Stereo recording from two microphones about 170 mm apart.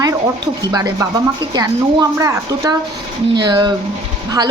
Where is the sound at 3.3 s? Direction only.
25° right (ahead or behind).